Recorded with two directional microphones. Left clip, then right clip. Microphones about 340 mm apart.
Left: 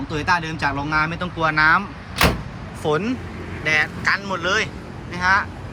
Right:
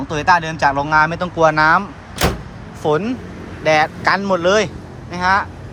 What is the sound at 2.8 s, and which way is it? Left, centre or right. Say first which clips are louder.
Speech: right 4 dB; centre.